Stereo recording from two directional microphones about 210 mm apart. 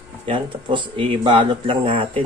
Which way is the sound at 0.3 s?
25° right (ahead or behind).